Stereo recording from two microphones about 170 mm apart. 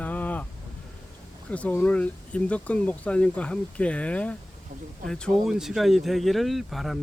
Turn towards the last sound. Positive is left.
turn(degrees=0)  # may be behind; listen again after turning